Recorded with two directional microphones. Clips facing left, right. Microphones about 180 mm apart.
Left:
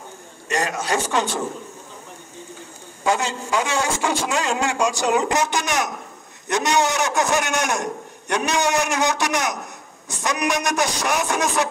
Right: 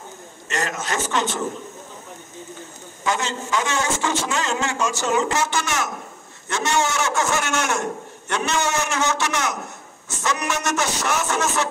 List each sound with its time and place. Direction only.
0.5 s a man's voice: 15° left (ahead or behind)
3.0 s a man's voice: 10° left (ahead or behind)